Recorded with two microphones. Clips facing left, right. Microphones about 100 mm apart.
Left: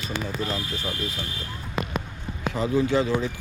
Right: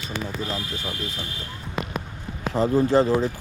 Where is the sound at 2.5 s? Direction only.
45° right (ahead or behind).